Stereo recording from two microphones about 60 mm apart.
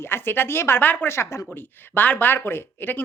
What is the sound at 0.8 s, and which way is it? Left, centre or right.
Speech, left.